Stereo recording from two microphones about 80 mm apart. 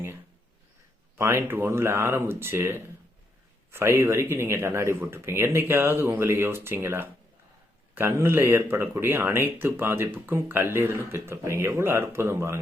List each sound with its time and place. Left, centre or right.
1.1 s speech: right